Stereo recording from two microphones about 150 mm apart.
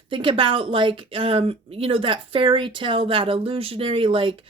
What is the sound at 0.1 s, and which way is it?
Speech, 35° right (ahead or behind).